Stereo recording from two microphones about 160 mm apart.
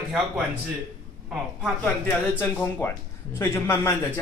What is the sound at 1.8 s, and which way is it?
Speech, 10° left (ahead or behind).